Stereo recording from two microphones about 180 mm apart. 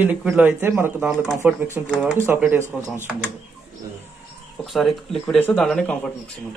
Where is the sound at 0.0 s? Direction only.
5° right (ahead or behind).